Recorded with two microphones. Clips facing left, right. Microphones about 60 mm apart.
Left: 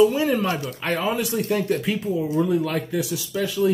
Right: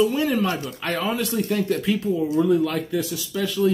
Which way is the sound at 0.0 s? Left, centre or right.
Centre.